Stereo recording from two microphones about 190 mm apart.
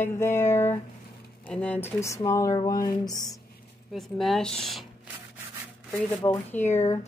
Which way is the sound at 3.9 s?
Centre (ahead or behind).